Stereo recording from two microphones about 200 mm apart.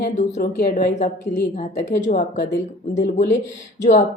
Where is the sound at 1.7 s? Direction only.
40° left (ahead or behind).